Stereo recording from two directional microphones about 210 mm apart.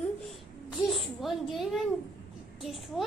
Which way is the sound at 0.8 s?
Centre (ahead or behind).